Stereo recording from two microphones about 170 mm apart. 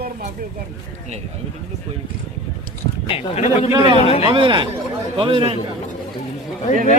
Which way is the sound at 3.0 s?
35° left (ahead or behind).